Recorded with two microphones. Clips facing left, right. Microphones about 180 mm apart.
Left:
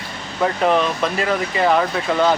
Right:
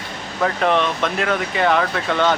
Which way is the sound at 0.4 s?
5° left (ahead or behind).